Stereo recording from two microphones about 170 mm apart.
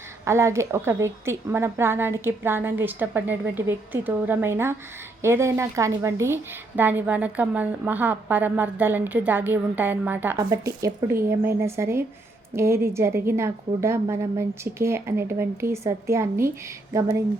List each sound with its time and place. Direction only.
0.3 s a woman's voice: 15° right (ahead or behind)